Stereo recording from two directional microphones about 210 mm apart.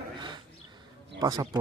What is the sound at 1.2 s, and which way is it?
Speech, 20° right (ahead or behind).